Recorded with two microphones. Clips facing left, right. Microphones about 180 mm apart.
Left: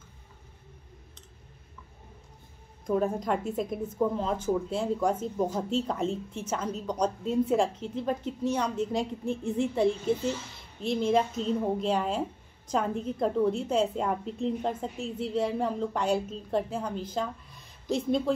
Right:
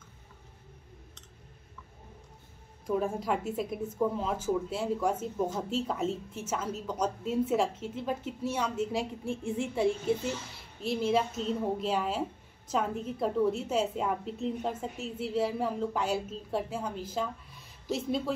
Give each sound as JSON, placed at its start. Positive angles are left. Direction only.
{"t": 2.9, "sound": "a woman's voice", "side_deg": -5}
{"t": 9.2, "sound": "a woman's voice", "side_deg": 40}
{"t": 9.8, "sound": "speech", "side_deg": -5}